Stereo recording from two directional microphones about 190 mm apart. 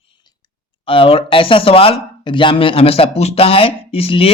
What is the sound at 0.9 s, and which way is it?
Speech, 30° left (ahead or behind).